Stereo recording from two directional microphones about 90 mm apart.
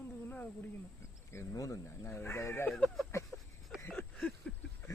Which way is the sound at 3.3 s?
25° left (ahead or behind).